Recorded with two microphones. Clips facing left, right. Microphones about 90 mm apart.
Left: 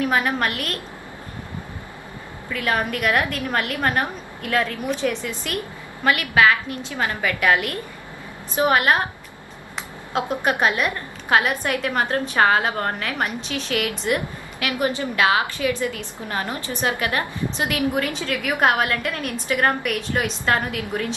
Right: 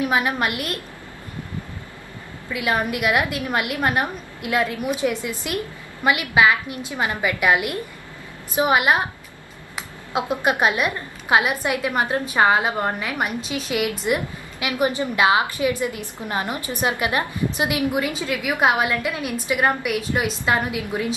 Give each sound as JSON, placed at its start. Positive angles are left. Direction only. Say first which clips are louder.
{"t": 0.0, "sound": "a woman's voice", "louder": "even", "side_deg": -10}
{"t": 2.5, "sound": "a woman's voice", "louder": "right 1 dB", "side_deg": -10}
{"t": 10.1, "sound": "a woman's voice", "louder": "right 1 dB", "side_deg": -15}